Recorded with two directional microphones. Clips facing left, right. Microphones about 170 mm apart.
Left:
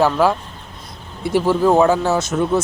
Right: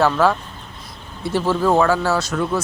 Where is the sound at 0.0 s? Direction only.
15° left (ahead or behind).